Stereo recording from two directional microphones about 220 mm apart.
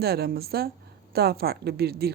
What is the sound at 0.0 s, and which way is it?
Speech, 45° right (ahead or behind).